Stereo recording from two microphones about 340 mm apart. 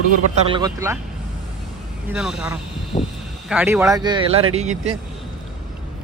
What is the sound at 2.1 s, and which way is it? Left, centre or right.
Speech, centre.